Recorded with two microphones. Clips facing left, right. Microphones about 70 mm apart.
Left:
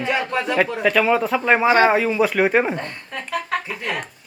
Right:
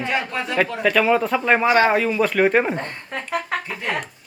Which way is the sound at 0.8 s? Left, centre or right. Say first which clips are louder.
Right 1 dB; centre.